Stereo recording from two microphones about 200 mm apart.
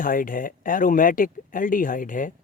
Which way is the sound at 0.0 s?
45° left (ahead or behind).